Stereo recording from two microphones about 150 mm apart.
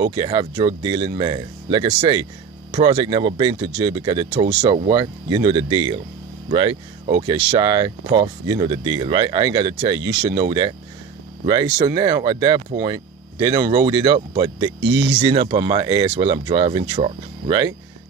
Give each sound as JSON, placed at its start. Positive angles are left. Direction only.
{"t": 0.0, "sound": "speech", "side_deg": -30}
{"t": 11.8, "sound": "speech", "side_deg": -25}